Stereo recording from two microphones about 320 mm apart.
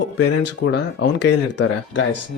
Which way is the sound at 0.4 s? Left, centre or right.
Left.